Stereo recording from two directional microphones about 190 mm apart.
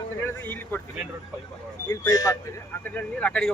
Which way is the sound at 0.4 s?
10° left (ahead or behind).